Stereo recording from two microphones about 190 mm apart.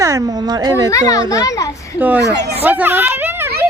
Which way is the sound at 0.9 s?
15° left (ahead or behind).